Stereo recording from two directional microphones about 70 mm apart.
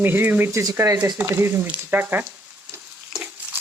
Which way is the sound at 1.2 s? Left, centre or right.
Right.